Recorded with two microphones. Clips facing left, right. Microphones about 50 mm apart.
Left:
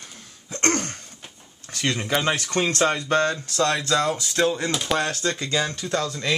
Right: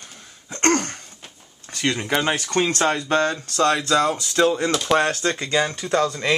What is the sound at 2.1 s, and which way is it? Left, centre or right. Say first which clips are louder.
Speech: right 1 dB; centre.